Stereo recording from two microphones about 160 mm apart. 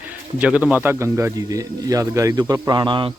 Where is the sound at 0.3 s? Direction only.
10° right (ahead or behind).